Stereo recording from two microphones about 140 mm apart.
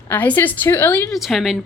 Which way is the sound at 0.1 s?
15° left (ahead or behind).